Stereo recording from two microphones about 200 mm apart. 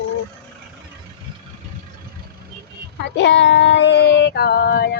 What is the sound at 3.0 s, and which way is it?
Child singing, 60° left (ahead or behind).